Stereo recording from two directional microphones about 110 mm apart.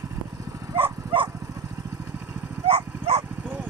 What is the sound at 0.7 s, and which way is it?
Dog, 50° right (ahead or behind).